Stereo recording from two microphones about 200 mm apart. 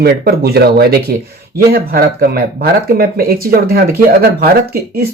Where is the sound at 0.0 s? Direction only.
50° right (ahead or behind).